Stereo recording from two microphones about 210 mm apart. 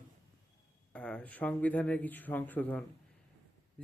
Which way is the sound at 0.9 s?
5° left (ahead or behind).